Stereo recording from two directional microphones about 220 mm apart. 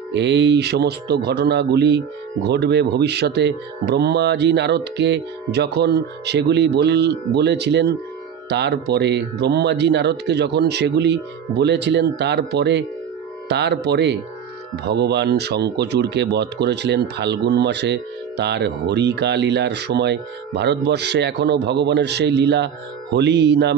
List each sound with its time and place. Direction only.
0.1 s speech: 50° right (ahead or behind)